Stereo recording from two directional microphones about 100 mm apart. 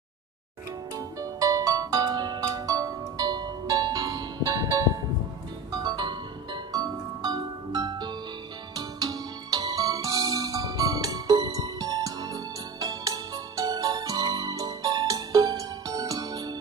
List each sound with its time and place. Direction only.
0.9 s music: 35° right (ahead or behind)
5.7 s music: 45° right (ahead or behind)